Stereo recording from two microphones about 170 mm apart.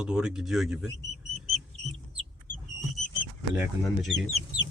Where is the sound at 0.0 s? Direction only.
5° right (ahead or behind).